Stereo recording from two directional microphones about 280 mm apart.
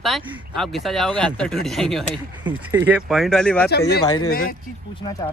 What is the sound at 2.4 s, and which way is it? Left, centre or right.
Speech, centre.